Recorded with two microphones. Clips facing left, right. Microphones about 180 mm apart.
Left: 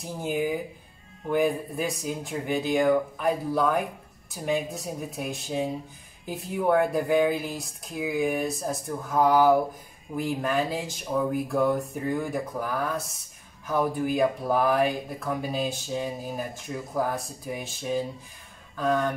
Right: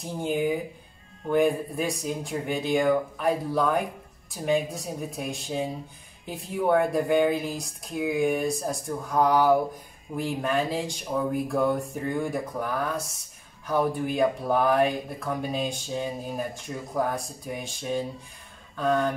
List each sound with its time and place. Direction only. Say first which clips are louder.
0.0 s speech: right 1 dB; centre (ahead or behind)